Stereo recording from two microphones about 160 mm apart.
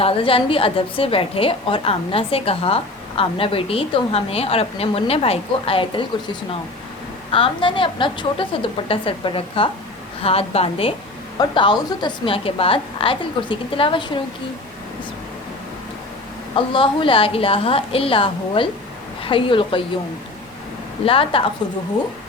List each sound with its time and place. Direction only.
0.0 s a woman's voice: 35° left (ahead or behind)
16.6 s a woman's voice: 35° left (ahead or behind)
21.0 s a woman's voice: 35° left (ahead or behind)